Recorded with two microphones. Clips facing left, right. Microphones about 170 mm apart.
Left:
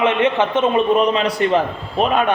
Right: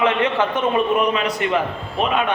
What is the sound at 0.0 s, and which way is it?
A man's voice, 20° left (ahead or behind).